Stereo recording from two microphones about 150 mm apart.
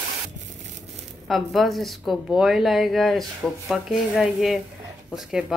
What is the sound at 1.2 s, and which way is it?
Speech, centre (ahead or behind).